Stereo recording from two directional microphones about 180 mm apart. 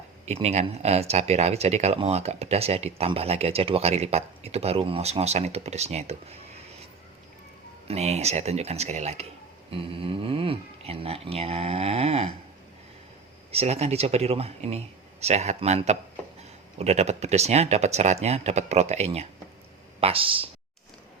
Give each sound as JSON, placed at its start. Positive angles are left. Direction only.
{"t": 0.3, "sound": "speech", "side_deg": -35}
{"t": 7.9, "sound": "speech", "side_deg": -35}
{"t": 13.5, "sound": "speech", "side_deg": -35}